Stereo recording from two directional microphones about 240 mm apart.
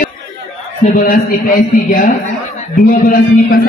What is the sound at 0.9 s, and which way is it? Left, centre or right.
A man's voice, left.